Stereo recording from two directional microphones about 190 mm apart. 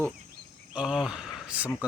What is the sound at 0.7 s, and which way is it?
Speech, 5° right (ahead or behind).